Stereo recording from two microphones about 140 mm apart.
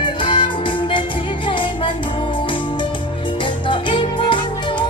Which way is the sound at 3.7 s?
35° left (ahead or behind).